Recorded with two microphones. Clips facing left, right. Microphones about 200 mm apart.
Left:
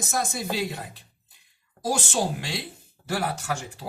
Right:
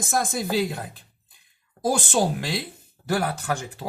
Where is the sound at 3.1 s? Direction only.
40° right (ahead or behind).